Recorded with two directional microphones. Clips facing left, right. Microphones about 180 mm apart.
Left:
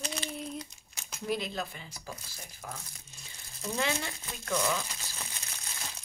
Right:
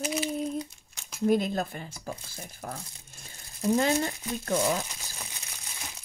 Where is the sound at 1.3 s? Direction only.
45° right (ahead or behind).